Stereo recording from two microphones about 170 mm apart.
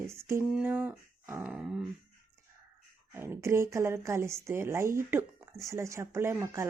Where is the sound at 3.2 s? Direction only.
15° right (ahead or behind).